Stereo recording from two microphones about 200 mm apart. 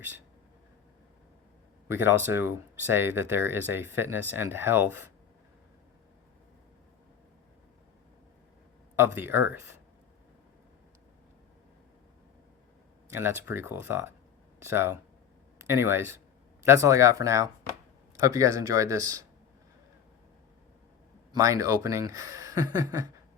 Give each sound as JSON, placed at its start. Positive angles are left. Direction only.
{"t": 1.9, "sound": "speech", "side_deg": -10}
{"t": 9.0, "sound": "speech", "side_deg": -10}
{"t": 13.1, "sound": "speech", "side_deg": -10}
{"t": 21.3, "sound": "speech", "side_deg": -15}